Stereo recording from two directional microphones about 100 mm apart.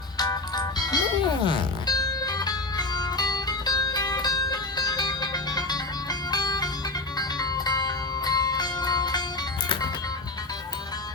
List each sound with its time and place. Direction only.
0.2 s music: 40° left (ahead or behind)